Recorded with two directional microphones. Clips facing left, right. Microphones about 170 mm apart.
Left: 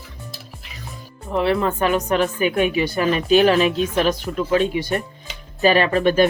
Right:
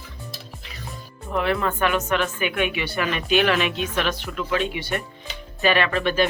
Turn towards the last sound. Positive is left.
turn(degrees=40)  # may be behind; listen again after turning